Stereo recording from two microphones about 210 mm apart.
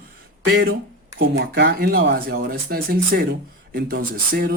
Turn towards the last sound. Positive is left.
turn(degrees=-45)  # may be behind; listen again after turning